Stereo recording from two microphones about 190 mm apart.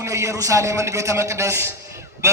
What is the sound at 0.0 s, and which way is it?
A man's voice, 15° right (ahead or behind).